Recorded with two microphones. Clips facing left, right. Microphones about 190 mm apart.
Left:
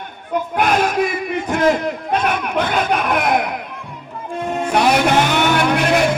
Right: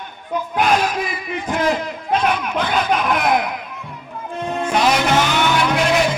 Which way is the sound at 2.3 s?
50° left (ahead or behind).